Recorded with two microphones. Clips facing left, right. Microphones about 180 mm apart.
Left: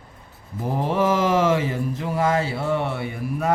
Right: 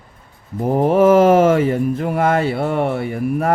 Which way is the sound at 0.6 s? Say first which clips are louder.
Right 9 dB; 55° right (ahead or behind).